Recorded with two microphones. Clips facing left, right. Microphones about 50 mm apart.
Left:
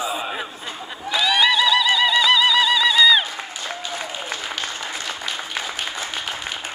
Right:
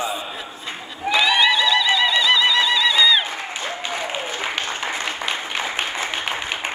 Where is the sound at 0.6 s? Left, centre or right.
Right.